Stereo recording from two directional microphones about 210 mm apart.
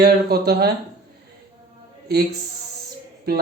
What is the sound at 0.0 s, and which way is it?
Speech, 50° right (ahead or behind).